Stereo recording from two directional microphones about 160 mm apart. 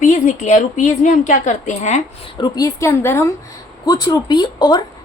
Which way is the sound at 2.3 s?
25° left (ahead or behind).